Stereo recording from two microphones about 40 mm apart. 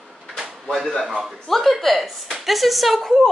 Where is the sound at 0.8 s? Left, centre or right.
Centre.